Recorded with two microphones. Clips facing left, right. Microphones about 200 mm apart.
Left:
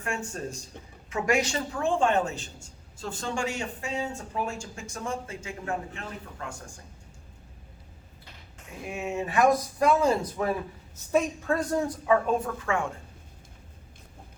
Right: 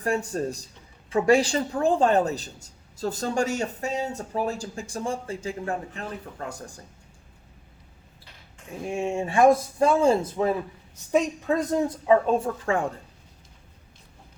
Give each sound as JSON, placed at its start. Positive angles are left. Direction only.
{"t": 0.0, "sound": "a woman's voice", "side_deg": -35}
{"t": 8.8, "sound": "a woman's voice", "side_deg": -30}